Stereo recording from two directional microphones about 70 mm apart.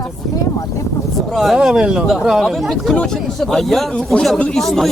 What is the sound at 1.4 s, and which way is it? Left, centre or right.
Speech, centre.